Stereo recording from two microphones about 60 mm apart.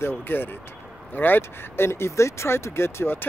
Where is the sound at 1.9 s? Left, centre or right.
Left.